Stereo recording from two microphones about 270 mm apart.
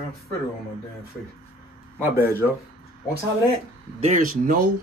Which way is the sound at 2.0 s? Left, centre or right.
Centre.